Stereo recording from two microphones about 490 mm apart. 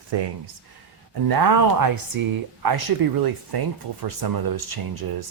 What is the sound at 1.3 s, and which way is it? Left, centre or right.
Speech, right.